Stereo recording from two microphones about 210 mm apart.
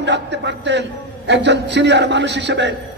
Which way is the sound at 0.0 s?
55° right (ahead or behind).